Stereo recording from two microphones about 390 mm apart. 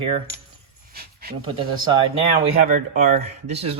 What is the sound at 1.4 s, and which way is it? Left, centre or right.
Speech, centre.